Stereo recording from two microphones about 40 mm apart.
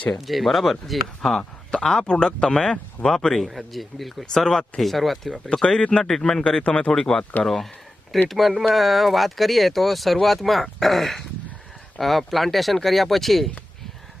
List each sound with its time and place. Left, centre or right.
0.2 s speech: centre
1.4 s speech: centre
3.4 s speech: centre
4.3 s speech: centre
4.8 s speech: centre
5.8 s speech: left
6.1 s speech: centre; by 6.9 s left
6.9 s speech: centre